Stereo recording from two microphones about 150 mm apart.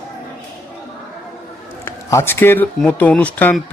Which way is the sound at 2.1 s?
15° left (ahead or behind).